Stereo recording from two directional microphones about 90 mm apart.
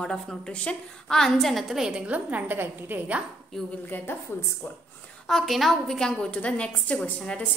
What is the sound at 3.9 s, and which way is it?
Speech, 20° left (ahead or behind).